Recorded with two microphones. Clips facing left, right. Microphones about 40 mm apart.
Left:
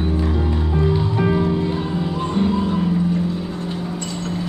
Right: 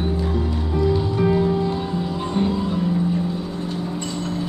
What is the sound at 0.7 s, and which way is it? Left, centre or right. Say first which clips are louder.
Music: right 1 dB; left.